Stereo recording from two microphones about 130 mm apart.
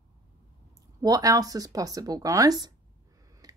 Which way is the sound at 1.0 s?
30° right (ahead or behind).